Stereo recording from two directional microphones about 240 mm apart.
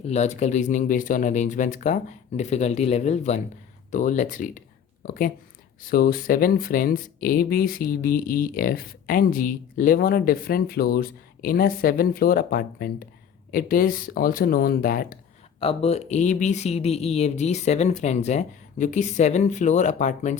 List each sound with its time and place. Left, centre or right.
0.0 s speech: left
15.6 s speech: left